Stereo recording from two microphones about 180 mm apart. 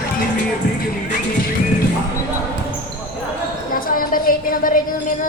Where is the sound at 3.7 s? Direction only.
50° left (ahead or behind).